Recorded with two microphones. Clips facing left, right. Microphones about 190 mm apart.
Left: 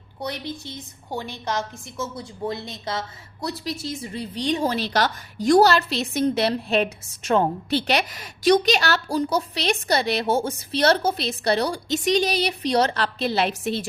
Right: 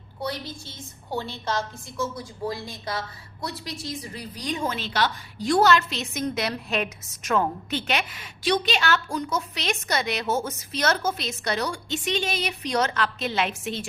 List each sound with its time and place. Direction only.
0.2 s a woman's voice: 20° left (ahead or behind); by 13.8 s 35° left (ahead or behind)